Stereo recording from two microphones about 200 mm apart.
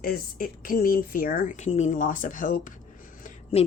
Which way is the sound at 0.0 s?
45° left (ahead or behind).